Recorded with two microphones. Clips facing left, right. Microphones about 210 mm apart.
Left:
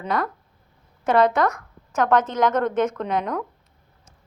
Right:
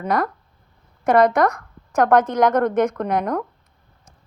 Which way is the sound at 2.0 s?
60° right (ahead or behind).